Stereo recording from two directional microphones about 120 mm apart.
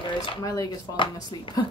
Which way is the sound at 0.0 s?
45° left (ahead or behind).